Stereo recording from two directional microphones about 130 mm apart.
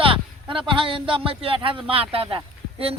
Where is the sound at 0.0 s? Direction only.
45° right (ahead or behind).